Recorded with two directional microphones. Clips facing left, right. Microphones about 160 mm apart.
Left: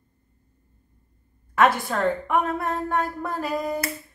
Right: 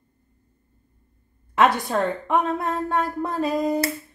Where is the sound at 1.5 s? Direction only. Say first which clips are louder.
Right 1 dB; 20° right (ahead or behind).